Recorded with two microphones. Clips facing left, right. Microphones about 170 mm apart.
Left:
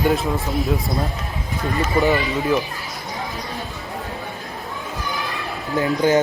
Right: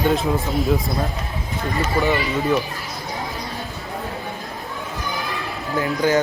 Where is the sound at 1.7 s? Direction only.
20° left (ahead or behind).